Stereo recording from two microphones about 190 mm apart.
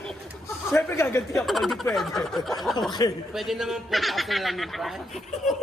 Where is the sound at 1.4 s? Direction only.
Centre (ahead or behind).